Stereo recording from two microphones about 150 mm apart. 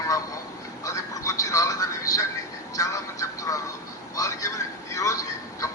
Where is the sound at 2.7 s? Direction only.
20° left (ahead or behind).